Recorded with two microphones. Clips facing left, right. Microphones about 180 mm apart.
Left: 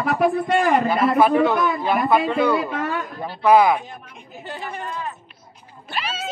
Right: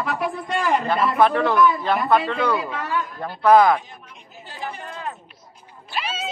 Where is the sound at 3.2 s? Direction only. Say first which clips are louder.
Even; 10° left (ahead or behind).